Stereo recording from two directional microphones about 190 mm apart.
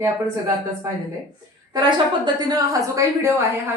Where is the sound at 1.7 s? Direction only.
25° right (ahead or behind).